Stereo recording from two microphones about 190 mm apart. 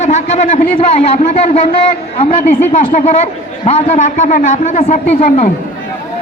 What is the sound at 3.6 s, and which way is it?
A man's voice, 35° left (ahead or behind).